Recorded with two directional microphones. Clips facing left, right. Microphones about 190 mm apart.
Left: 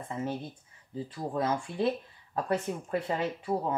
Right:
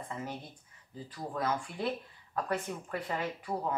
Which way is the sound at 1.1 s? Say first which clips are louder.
Left 3 dB; 25° left (ahead or behind).